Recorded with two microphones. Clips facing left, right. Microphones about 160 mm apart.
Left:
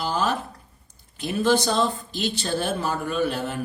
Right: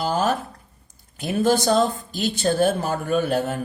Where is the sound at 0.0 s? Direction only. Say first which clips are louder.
Right 3 dB; 50° right (ahead or behind).